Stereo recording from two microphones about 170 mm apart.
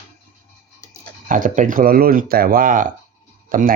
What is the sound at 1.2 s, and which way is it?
Speech, 50° right (ahead or behind).